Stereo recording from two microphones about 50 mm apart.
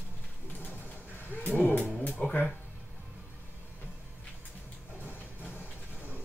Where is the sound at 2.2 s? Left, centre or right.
Left.